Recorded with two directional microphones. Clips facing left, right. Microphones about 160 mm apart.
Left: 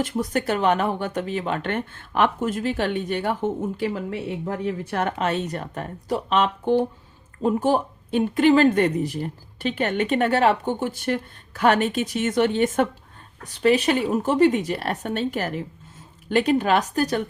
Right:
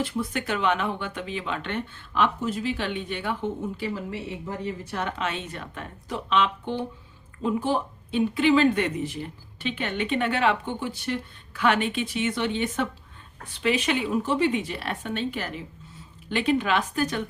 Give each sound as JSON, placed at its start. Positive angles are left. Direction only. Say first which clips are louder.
{"t": 0.0, "sound": "speech", "louder": "left 4 dB", "side_deg": 40}
{"t": 4.4, "sound": "speech", "louder": "left 5 dB", "side_deg": 60}